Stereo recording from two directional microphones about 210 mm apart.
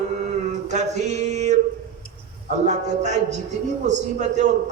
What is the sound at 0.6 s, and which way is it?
Speech, 35° right (ahead or behind).